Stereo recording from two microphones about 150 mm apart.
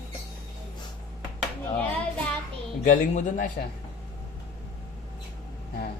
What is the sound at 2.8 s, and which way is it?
Speech, 60° left (ahead or behind).